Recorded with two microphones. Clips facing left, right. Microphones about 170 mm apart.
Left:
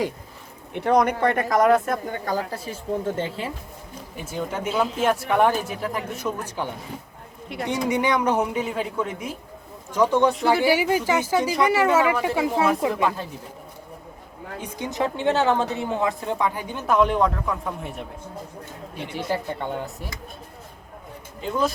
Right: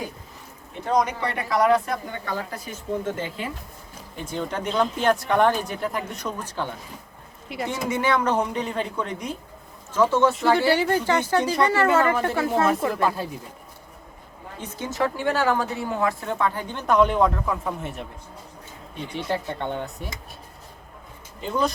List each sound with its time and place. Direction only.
0.7 s speech: 65° left (ahead or behind); by 3.5 s 30° left (ahead or behind)
4.2 s a woman's voice: 5° left (ahead or behind)
7.5 s a woman's voice: centre (ahead or behind)
7.9 s a woman's voice: 15° left (ahead or behind)
9.9 s a woman's voice: 15° left (ahead or behind)
10.3 s a woman's voice: centre (ahead or behind)
12.9 s a woman's voice: 5° right (ahead or behind)
14.6 s a woman's voice: 15° left (ahead or behind); by 18.0 s centre (ahead or behind)
19.1 s a woman's voice: 5° left (ahead or behind)
21.4 s a woman's voice: centre (ahead or behind)